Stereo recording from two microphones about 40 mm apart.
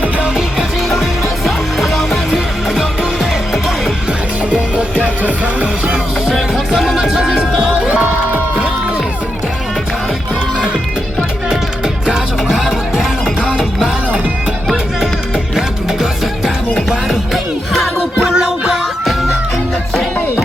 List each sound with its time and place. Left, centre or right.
1.5 s music: centre
2.7 s music: centre
5.0 s music: right
6.9 s music: centre
12.0 s music: centre
16.7 s music: centre
18.3 s music: centre